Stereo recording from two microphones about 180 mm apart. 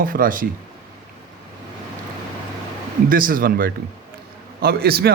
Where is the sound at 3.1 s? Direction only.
50° right (ahead or behind).